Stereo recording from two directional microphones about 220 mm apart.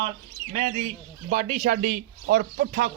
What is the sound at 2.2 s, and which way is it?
Speech, 45° right (ahead or behind).